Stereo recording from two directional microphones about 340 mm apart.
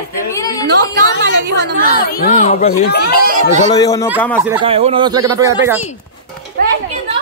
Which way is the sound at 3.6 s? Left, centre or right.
Centre.